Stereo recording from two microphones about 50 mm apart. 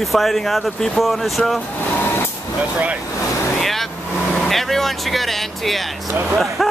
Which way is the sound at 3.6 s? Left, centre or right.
Centre.